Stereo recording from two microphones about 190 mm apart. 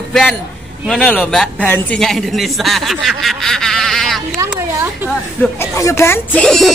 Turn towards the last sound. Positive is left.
turn(degrees=5)  # may be behind; listen again after turning